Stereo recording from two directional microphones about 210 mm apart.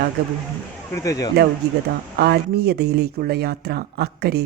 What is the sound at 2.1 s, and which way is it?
Speech, 50° right (ahead or behind).